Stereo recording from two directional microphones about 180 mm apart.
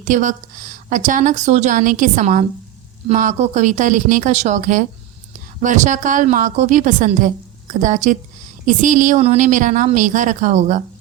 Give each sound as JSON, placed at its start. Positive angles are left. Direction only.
{"t": 0.0, "sound": "a woman's voice", "side_deg": -45}